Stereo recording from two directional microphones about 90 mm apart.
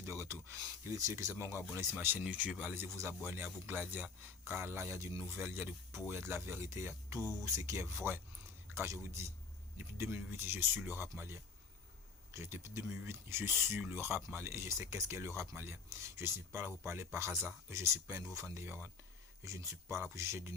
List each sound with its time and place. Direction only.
0.0 s speech: 35° right (ahead or behind)
5.3 s speech: 25° right (ahead or behind)
12.3 s speech: 35° right (ahead or behind)